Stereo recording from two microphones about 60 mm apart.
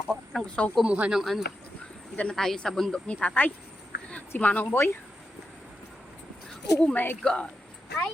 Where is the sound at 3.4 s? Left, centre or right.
Left.